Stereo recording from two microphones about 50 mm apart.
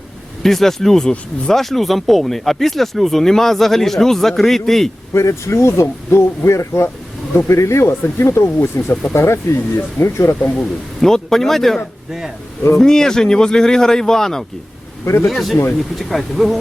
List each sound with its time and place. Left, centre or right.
0.4 s speech: centre
5.1 s speech: left
11.0 s speech: centre
15.0 s speech: left
15.3 s speech: centre